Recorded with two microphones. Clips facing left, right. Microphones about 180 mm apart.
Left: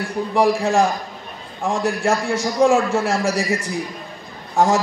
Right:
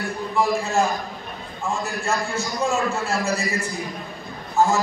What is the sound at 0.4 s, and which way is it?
A man's voice, 90° left.